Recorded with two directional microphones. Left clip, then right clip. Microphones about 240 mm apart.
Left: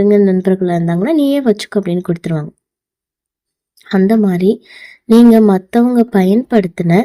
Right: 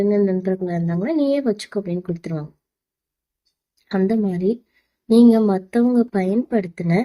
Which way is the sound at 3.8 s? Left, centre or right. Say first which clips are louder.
Left 8 dB; left.